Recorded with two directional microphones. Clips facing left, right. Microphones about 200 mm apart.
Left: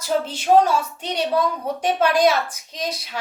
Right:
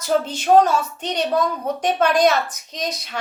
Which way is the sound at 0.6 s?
10° left (ahead or behind).